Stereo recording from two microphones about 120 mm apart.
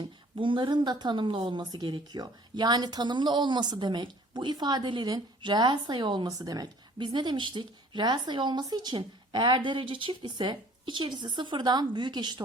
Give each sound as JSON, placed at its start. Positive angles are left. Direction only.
{"t": 0.3, "sound": "a woman's voice", "side_deg": -45}